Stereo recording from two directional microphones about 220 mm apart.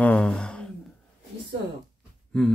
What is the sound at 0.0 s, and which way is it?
Gasp, 5° left (ahead or behind).